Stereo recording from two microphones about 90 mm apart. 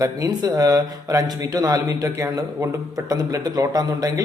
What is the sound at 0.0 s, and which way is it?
Speech, 40° right (ahead or behind).